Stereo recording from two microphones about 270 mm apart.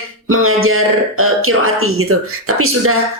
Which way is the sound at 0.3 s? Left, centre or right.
Right.